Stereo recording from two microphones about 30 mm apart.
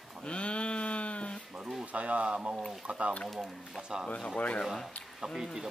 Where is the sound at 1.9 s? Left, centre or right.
Right.